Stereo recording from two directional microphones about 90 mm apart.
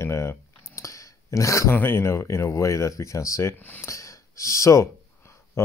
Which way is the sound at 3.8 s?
35° left (ahead or behind).